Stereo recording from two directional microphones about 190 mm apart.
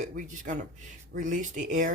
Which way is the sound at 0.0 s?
40° right (ahead or behind).